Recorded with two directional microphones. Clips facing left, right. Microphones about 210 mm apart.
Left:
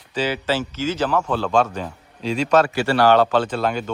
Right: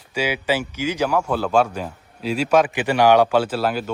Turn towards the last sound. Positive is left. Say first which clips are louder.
# even
turn(degrees=-5)  # may be behind; listen again after turning